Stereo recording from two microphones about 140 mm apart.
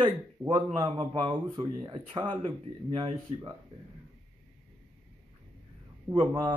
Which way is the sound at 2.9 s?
50° right (ahead or behind).